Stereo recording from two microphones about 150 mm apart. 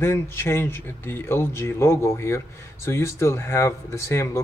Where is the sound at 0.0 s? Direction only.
15° left (ahead or behind).